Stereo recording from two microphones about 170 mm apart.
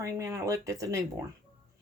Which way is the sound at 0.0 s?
20° right (ahead or behind).